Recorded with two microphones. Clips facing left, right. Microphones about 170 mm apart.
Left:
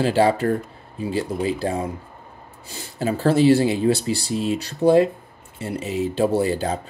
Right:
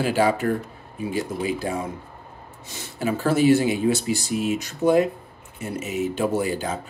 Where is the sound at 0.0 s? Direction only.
35° left (ahead or behind).